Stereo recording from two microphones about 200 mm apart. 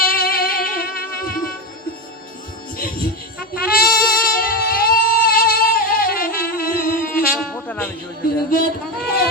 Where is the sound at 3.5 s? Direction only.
50° left (ahead or behind).